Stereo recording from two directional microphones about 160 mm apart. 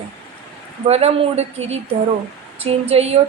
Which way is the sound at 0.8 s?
40° right (ahead or behind).